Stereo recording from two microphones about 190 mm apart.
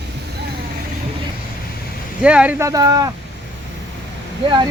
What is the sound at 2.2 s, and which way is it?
Speech, 5° right (ahead or behind).